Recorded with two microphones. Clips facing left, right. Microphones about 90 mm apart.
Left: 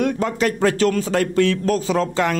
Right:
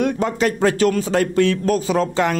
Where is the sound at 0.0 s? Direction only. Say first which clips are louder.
Right 1 dB; 20° right (ahead or behind).